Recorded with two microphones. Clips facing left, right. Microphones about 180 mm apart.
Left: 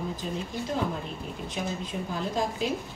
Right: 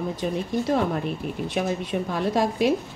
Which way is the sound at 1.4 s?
70° right (ahead or behind).